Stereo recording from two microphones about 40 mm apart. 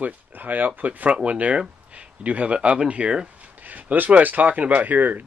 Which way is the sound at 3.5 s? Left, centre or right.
Right.